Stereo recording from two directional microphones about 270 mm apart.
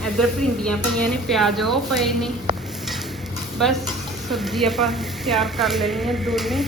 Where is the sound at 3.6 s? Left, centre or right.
Centre.